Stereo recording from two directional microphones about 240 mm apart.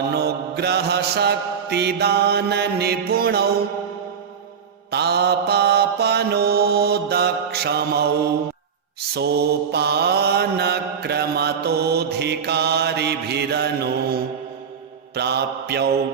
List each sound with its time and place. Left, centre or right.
0.1 s mantra: right
4.9 s mantra: right
9.1 s mantra: right